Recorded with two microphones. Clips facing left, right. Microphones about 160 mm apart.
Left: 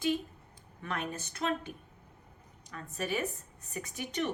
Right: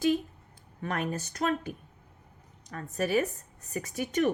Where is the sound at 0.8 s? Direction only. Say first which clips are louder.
Right 5 dB; 40° right (ahead or behind).